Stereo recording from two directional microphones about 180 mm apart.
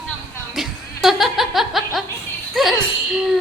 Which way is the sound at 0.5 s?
Centre (ahead or behind).